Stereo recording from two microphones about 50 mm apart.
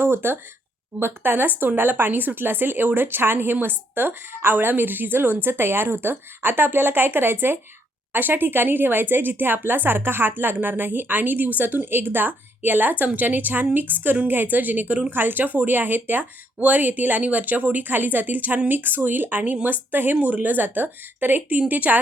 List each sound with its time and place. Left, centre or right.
0.0 s speech: right